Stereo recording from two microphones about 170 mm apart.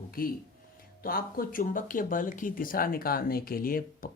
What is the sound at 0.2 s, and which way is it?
Speech, 60° left (ahead or behind).